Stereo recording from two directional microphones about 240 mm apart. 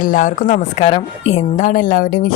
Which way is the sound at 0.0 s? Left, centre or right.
Left.